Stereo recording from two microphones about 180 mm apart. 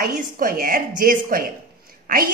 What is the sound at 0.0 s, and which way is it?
A woman's voice, 50° right (ahead or behind).